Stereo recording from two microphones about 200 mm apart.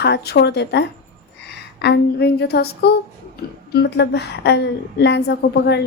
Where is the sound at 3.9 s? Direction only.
55° left (ahead or behind).